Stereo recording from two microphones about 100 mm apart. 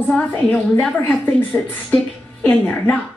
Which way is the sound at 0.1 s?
5° left (ahead or behind).